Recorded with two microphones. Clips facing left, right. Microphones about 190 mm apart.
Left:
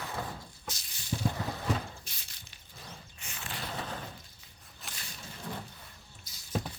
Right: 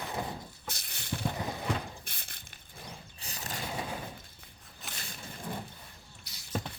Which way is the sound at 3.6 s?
10° right (ahead or behind).